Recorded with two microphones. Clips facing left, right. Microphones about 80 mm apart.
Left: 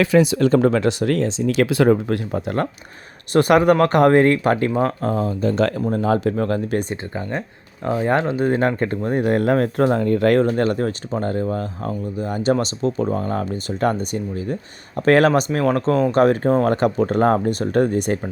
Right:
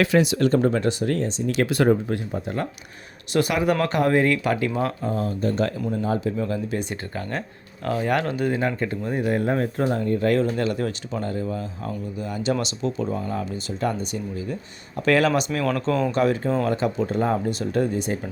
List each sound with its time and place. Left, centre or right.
0.7 s speech: left
2.0 s speech: left
3.3 s speech: left
5.5 s speech: left
6.9 s speech: left
8.4 s speech: left
9.4 s speech: left
10.3 s speech: left
16.1 s speech: left